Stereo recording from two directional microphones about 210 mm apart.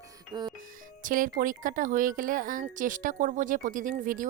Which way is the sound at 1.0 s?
40° right (ahead or behind).